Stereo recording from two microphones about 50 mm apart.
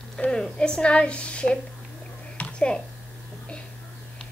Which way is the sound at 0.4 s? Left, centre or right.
Centre.